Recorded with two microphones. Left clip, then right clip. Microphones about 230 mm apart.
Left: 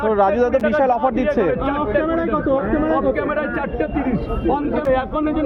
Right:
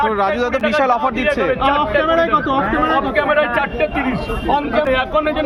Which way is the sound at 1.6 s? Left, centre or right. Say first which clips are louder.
Right 5 dB; right.